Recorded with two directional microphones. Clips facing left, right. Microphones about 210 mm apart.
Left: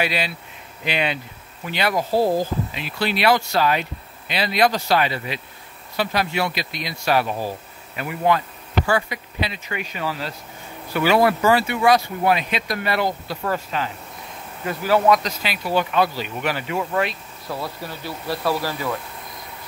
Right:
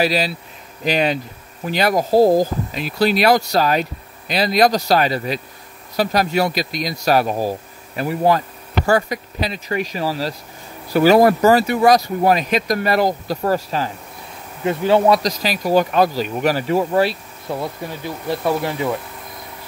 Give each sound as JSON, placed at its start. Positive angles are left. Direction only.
{"t": 0.0, "sound": "speech", "side_deg": -40}
{"t": 14.6, "sound": "speech", "side_deg": -25}
{"t": 17.5, "sound": "speech", "side_deg": -20}